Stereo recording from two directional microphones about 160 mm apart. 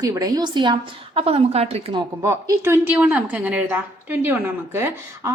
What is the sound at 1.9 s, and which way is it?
A woman's voice, 20° right (ahead or behind).